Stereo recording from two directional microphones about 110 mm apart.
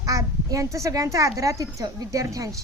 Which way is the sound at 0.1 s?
30° right (ahead or behind).